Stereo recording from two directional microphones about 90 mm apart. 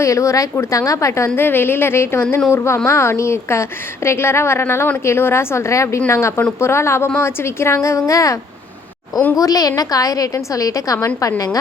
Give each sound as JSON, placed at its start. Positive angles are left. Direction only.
{"t": 0.0, "sound": "a woman's voice", "side_deg": 35}
{"t": 9.4, "sound": "a woman's voice", "side_deg": 40}